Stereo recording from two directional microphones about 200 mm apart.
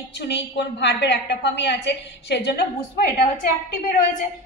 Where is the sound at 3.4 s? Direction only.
40° left (ahead or behind).